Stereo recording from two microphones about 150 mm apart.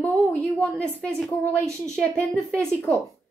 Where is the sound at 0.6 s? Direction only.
5° left (ahead or behind).